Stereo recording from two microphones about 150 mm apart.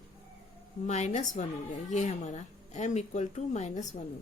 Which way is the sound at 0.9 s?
50° left (ahead or behind).